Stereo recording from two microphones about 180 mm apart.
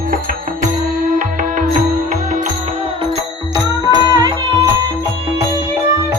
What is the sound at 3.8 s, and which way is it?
Music, 20° right (ahead or behind).